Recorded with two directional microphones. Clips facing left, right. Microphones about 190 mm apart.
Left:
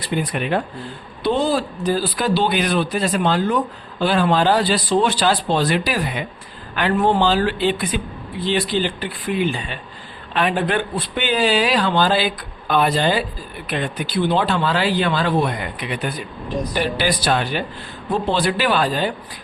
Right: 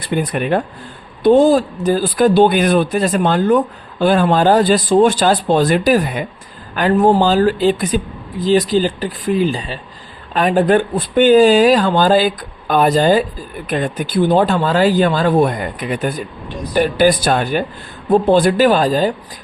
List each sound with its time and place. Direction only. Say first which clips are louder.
0.0 s speech: right 4 dB; 50° right (ahead or behind)